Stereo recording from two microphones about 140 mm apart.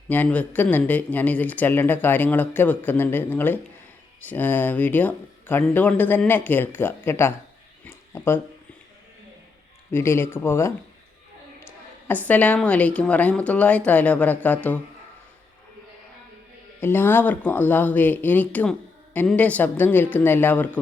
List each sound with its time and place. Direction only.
0.1 s speech: 10° left (ahead or behind)
7.9 s a sound: 15° left (ahead or behind)
9.9 s speech: 15° left (ahead or behind)
12.0 s speech: 10° left (ahead or behind)
16.8 s speech: 15° left (ahead or behind)